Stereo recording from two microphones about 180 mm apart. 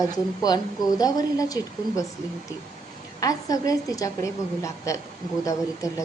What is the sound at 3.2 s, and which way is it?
A woman's voice, 20° left (ahead or behind).